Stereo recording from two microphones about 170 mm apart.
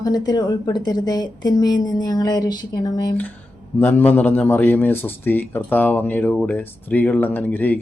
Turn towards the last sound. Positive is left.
turn(degrees=10)  # may be behind; listen again after turning